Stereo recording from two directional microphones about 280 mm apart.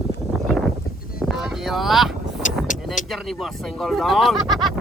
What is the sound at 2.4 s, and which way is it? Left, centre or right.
Vehicle, left.